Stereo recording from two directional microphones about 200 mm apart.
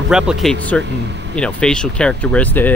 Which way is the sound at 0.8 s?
60° right (ahead or behind).